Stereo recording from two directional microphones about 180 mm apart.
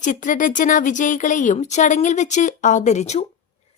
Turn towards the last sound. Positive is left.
turn(degrees=40)  # may be behind; listen again after turning